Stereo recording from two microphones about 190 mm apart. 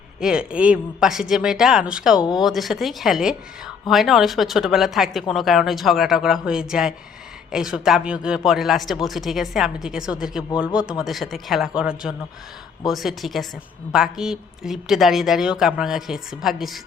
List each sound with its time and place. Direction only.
0.2 s a man's voice: 5° right (ahead or behind)